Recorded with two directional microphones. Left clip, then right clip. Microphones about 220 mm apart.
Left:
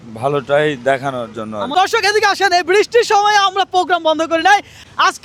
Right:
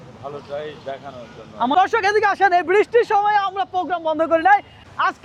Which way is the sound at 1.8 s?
20° left (ahead or behind).